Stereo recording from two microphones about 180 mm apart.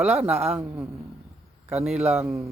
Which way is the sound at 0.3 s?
35° right (ahead or behind).